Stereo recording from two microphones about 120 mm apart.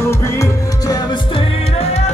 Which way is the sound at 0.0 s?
20° left (ahead or behind).